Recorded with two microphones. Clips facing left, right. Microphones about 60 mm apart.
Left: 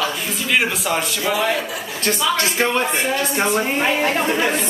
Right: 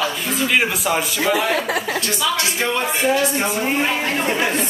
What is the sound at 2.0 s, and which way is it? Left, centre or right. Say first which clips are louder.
Speech: left 2 dB; left.